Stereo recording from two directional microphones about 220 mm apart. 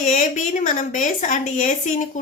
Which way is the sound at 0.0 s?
35° left (ahead or behind).